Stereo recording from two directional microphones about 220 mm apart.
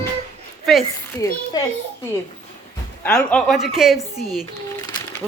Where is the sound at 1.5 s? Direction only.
15° left (ahead or behind).